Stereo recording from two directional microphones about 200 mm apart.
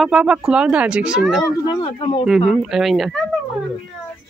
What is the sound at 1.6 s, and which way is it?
Speech, 25° left (ahead or behind).